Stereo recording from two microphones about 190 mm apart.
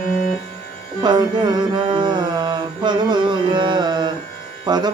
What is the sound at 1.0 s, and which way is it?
Music, 20° right (ahead or behind).